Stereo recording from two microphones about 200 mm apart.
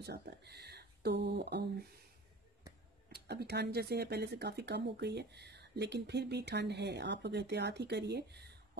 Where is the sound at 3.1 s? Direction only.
55° right (ahead or behind).